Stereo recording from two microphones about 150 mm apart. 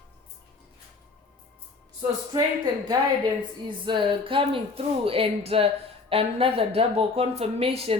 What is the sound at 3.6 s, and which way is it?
Speech, 30° right (ahead or behind).